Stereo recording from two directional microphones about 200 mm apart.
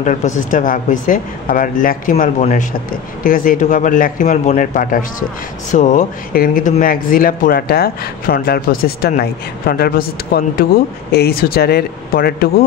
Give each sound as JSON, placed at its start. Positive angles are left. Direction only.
{"t": 0.0, "sound": "speech", "side_deg": 40}